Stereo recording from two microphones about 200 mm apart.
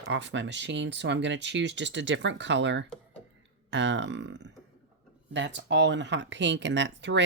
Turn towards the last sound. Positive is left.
turn(degrees=-60)  # may be behind; listen again after turning